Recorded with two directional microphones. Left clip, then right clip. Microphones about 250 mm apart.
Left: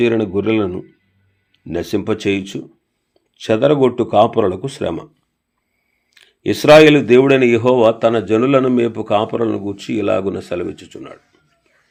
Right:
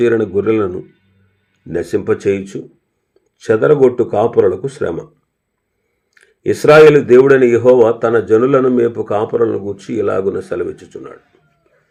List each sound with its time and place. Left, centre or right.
0.0 s a man's voice: left
2.0 s speech: left
3.4 s a man's voice: left
6.1 s a man's voice: left